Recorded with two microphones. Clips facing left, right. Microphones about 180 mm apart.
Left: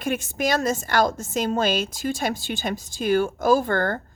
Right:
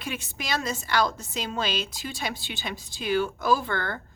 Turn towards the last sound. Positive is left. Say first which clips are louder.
# left 6 dB
turn(degrees=45)  # may be behind; listen again after turning